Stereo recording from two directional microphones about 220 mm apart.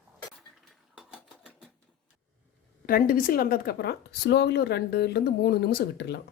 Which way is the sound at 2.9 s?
40° left (ahead or behind).